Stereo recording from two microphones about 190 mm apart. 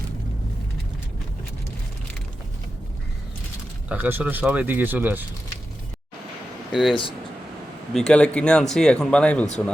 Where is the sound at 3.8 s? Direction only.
10° right (ahead or behind).